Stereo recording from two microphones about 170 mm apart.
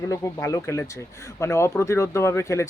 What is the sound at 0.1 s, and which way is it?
Speech, 20° left (ahead or behind).